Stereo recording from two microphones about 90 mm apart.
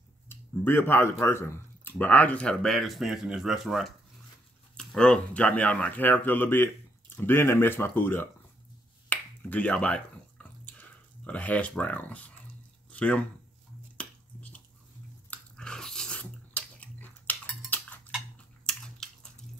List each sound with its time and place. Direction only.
0.3 s speech: 25° left (ahead or behind)
9.1 s finger snapping: 15° left (ahead or behind)
12.9 s speech: 15° left (ahead or behind)
13.9 s finger snapping: 15° left (ahead or behind)
15.2 s a sound: 15° left (ahead or behind)
18.7 s a sound: 10° left (ahead or behind)